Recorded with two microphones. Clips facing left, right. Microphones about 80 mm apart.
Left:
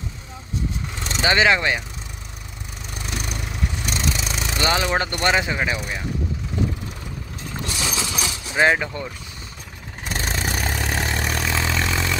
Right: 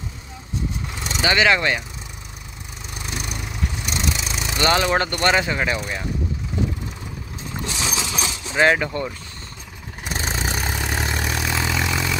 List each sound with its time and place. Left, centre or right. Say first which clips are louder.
1.2 s speech: even; left
3.2 s vehicle: even; centre
4.6 s speech: right 3 dB; centre
7.6 s vehicle: even; right
8.2 s a sound: right 1 dB; right
8.5 s speech: right 1 dB; centre
10.0 s vehicle: even; centre